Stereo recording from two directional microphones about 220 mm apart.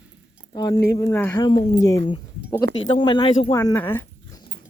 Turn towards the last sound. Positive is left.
turn(degrees=10)  # may be behind; listen again after turning